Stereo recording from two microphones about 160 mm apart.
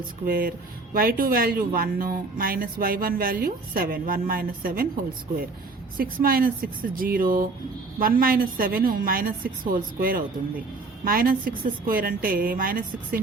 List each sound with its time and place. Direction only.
0.3 s speech: 65° right (ahead or behind)
6.0 s speech: 65° right (ahead or behind)